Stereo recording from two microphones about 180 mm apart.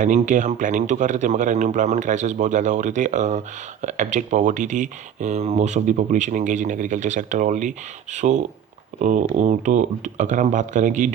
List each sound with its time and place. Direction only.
0.0 s a man's voice: 45° right (ahead or behind)